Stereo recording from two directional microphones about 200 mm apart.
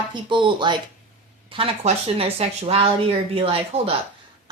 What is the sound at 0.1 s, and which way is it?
A child's voice, 25° right (ahead or behind).